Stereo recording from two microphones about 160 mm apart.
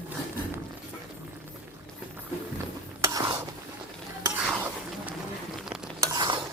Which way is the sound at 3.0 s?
20° right (ahead or behind).